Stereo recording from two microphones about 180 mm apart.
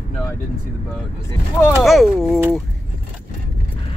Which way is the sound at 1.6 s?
Centre (ahead or behind).